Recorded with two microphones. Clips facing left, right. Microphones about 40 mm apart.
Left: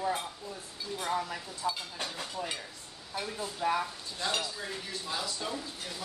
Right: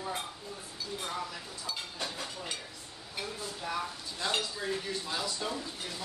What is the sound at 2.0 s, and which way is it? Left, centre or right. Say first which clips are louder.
Speech: left 3 dB; centre.